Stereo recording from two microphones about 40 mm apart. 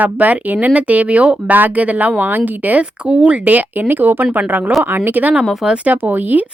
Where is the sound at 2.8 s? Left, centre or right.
Right.